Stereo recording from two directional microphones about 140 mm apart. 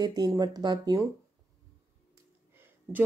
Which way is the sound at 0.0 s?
30° right (ahead or behind).